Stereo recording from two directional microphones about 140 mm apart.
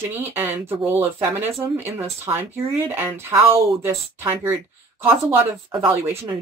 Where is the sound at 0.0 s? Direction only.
15° right (ahead or behind).